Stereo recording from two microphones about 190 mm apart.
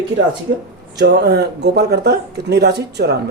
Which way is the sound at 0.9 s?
60° right (ahead or behind).